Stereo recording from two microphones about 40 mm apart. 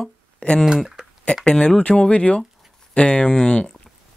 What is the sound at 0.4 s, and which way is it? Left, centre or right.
Speech, left.